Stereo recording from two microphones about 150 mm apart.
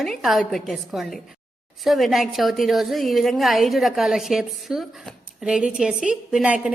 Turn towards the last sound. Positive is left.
turn(degrees=-5)  # may be behind; listen again after turning